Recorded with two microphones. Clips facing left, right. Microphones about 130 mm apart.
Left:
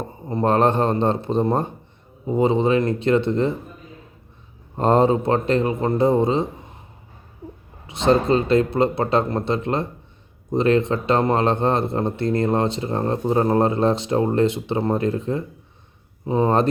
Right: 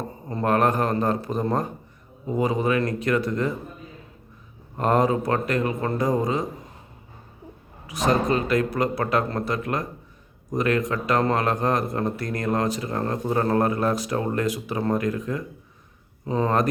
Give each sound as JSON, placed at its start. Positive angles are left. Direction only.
{"t": 0.3, "sound": "a man's voice", "side_deg": 25}
{"t": 4.8, "sound": "a man's voice", "side_deg": 30}
{"t": 7.9, "sound": "a man's voice", "side_deg": 25}